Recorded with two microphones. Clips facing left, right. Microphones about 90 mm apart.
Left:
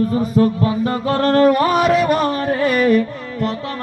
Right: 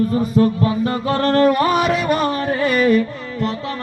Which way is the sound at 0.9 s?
40° left (ahead or behind).